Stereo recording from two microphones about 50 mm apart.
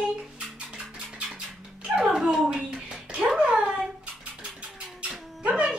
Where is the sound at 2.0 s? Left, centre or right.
Centre.